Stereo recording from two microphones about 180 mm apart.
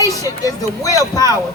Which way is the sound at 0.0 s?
20° left (ahead or behind).